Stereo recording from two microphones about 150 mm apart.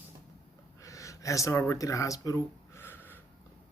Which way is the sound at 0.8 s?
20° left (ahead or behind).